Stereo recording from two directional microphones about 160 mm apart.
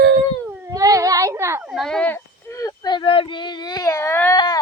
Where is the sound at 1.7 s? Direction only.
Centre (ahead or behind).